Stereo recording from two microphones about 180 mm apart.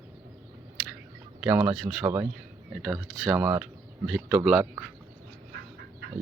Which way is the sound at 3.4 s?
15° right (ahead or behind).